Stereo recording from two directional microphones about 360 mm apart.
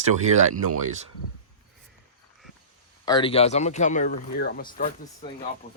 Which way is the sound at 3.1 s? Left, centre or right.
Centre.